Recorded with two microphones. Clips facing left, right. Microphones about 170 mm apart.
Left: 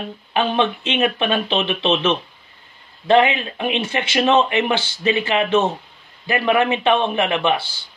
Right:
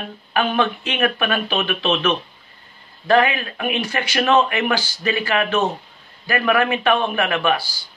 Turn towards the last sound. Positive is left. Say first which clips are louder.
# left 1 dB
turn(degrees=25)  # may be behind; listen again after turning